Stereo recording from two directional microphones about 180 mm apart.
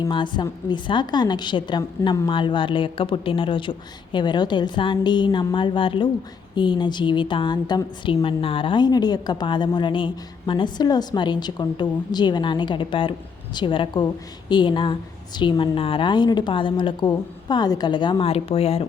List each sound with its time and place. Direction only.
0.0 s a woman's voice: 25° left (ahead or behind)